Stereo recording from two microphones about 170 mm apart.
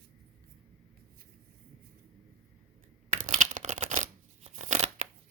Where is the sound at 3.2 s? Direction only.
45° right (ahead or behind).